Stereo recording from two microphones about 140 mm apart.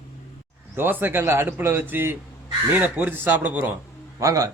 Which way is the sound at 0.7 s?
15° right (ahead or behind).